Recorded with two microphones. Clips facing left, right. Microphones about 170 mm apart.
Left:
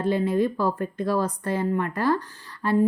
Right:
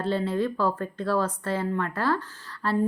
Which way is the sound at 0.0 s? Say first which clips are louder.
Left 3 dB; 15° left (ahead or behind).